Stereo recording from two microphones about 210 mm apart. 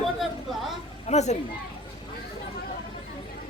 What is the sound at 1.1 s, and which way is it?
Speech, 30° left (ahead or behind).